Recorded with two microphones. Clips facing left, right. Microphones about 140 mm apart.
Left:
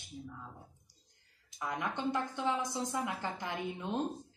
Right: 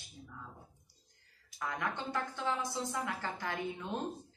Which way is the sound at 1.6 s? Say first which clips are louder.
Left 2 dB; 20° left (ahead or behind).